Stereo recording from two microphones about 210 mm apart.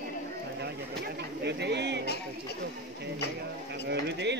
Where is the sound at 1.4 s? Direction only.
55° right (ahead or behind).